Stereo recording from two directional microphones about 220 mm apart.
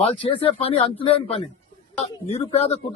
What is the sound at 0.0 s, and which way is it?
A man's voice, 25° left (ahead or behind).